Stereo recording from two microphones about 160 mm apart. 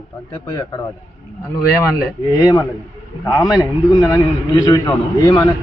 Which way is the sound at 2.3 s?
25° left (ahead or behind).